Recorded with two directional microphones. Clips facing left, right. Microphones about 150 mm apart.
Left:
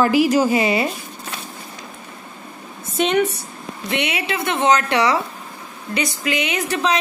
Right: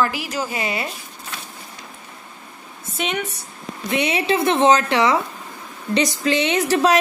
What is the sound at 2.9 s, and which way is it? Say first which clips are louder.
Speech: left 7 dB; 5° right (ahead or behind).